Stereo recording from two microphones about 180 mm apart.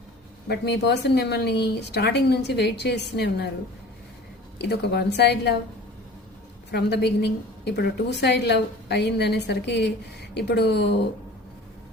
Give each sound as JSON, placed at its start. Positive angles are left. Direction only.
{"t": 0.4, "sound": "speech", "side_deg": 65}
{"t": 4.5, "sound": "a woman's voice", "side_deg": 65}
{"t": 6.7, "sound": "speech", "side_deg": 70}